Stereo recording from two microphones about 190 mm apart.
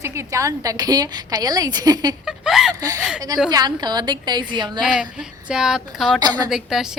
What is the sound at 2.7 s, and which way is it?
A woman's voice, 20° right (ahead or behind).